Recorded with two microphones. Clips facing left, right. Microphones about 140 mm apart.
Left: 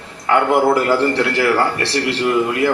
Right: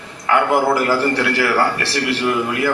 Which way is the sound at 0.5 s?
25° left (ahead or behind).